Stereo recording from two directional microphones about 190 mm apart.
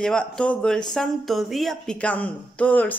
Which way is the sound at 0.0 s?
5° left (ahead or behind).